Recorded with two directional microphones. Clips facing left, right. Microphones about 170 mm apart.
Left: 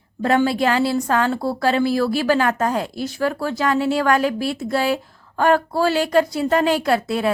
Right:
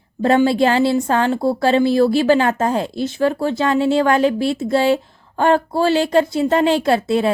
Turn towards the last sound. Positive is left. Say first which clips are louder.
# right 3 dB
turn(degrees=-25)  # may be behind; listen again after turning